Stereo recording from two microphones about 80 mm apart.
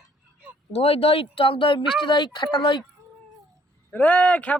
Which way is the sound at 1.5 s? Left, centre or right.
Left.